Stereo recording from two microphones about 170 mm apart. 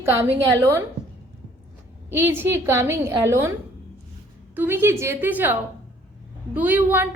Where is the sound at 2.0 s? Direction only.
15° right (ahead or behind).